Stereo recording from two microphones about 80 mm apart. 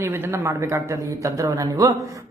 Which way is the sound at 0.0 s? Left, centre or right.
Right.